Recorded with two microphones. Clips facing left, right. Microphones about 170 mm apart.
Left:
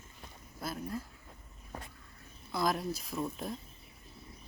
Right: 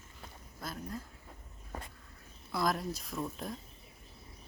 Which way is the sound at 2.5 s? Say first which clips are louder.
Left 1 dB; centre (ahead or behind).